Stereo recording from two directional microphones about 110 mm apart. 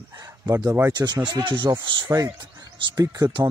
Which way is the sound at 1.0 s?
40° right (ahead or behind).